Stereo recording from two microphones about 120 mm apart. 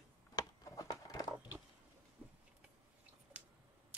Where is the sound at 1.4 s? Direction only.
10° right (ahead or behind).